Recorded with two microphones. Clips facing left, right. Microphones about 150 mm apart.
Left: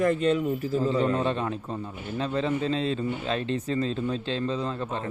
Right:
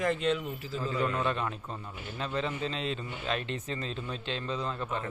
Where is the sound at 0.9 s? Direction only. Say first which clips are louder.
Left 2 dB; 30° left (ahead or behind).